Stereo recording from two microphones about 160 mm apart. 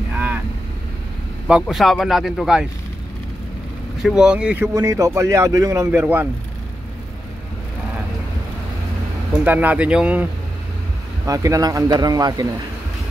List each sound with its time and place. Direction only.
1.5 s speech: centre (ahead or behind)
4.0 s speech: 5° right (ahead or behind)
4.7 s a man's voice: 20° right (ahead or behind)
9.4 s speech: 10° right (ahead or behind)
11.2 s a man's voice: 20° right (ahead or behind)